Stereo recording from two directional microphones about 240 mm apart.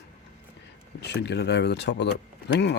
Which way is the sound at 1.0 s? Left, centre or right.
Left.